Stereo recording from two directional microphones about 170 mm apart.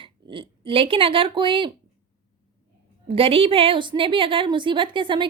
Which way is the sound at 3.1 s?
35° right (ahead or behind).